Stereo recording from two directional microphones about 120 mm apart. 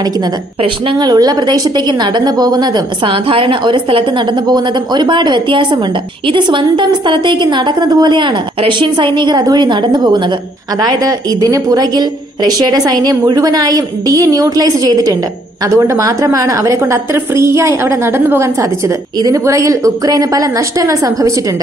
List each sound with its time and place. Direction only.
0.9 s a woman's voice: 35° right (ahead or behind)